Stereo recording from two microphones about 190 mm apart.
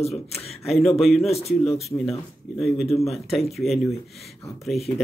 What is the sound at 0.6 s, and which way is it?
Speech, centre (ahead or behind).